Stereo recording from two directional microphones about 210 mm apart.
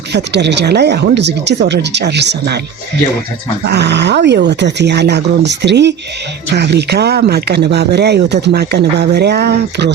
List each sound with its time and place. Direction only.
0.1 s speech: 55° right (ahead or behind)
3.7 s speech: 50° right (ahead or behind)